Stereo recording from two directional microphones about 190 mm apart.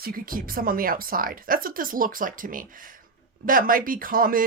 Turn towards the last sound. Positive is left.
turn(degrees=-45)  # may be behind; listen again after turning